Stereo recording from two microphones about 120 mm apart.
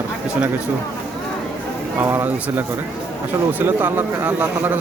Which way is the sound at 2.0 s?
15° right (ahead or behind).